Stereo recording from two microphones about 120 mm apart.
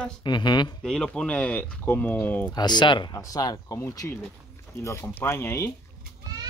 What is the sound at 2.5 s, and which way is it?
Speech, 35° left (ahead or behind).